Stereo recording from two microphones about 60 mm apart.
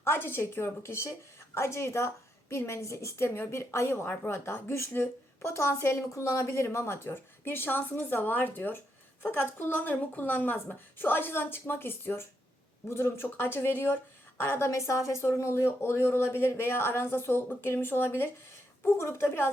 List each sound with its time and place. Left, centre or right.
0.0 s speech: left
4.3 s a woman's voice: left